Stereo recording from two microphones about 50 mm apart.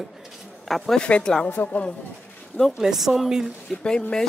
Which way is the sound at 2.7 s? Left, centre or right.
Centre.